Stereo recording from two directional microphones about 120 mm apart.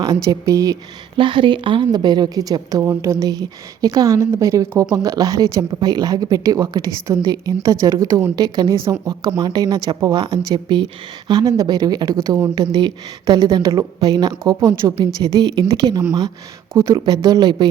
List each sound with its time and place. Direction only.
0.0 s a woman's voice: 30° right (ahead or behind)
1.1 s a woman's voice: 45° right (ahead or behind)